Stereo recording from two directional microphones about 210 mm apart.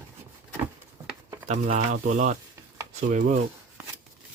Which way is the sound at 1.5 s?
30° right (ahead or behind).